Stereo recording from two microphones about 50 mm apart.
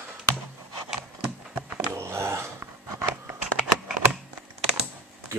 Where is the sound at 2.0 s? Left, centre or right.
Right.